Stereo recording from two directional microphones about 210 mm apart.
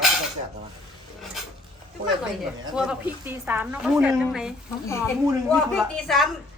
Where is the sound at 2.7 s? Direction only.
5° right (ahead or behind).